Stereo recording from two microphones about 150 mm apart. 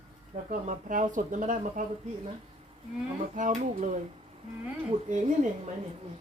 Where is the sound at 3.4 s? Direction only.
55° right (ahead or behind).